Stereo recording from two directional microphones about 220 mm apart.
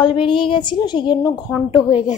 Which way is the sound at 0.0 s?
25° left (ahead or behind).